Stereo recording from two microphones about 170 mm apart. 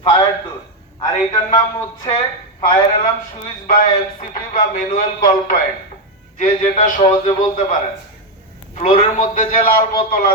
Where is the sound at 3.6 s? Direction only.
55° left (ahead or behind).